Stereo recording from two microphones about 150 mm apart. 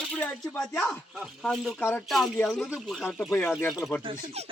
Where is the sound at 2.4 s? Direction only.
Centre (ahead or behind).